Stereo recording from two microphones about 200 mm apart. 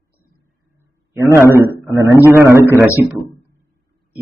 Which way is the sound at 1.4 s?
10° right (ahead or behind).